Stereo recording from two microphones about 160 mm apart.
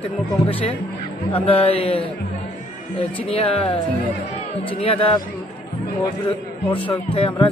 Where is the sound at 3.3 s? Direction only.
35° left (ahead or behind).